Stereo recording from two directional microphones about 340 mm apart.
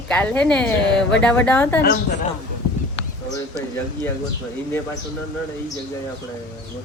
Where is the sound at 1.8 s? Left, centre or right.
Left.